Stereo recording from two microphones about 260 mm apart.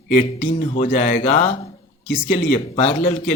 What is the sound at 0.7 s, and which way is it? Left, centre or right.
A man's voice, left.